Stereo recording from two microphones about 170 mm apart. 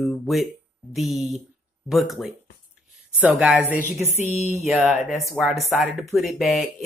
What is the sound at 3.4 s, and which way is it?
Speech, 10° right (ahead or behind).